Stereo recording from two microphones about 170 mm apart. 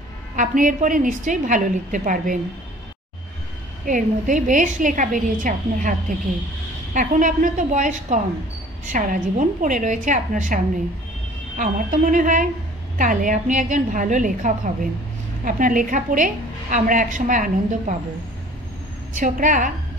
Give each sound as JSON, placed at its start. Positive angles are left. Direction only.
{"t": 0.4, "sound": "a woman's voice", "side_deg": -50}
{"t": 3.8, "sound": "a woman's voice", "side_deg": -50}
{"t": 19.1, "sound": "a woman's voice", "side_deg": -50}